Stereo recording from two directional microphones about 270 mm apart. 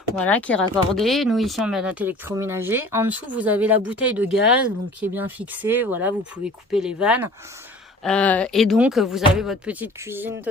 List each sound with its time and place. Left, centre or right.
0.2 s speech: centre